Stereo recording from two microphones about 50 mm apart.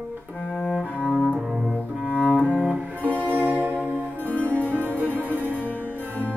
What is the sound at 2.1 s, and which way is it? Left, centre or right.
Cello, right.